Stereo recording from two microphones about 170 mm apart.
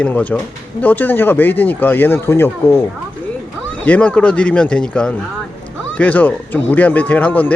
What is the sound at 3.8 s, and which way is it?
Speech, 10° left (ahead or behind).